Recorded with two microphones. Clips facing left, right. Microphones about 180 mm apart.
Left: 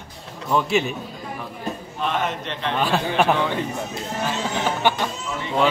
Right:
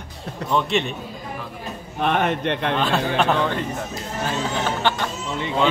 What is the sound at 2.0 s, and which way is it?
Speech, 60° right (ahead or behind).